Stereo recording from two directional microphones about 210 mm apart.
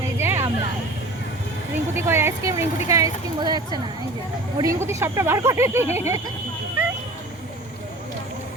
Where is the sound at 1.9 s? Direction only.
10° right (ahead or behind).